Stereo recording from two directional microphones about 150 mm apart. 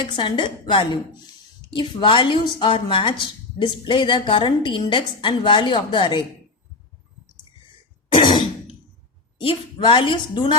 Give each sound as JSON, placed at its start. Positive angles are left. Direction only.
{"t": 0.0, "sound": "a woman's voice", "side_deg": 30}
{"t": 8.1, "sound": "throat clearing", "side_deg": 35}
{"t": 9.4, "sound": "a woman's voice", "side_deg": 35}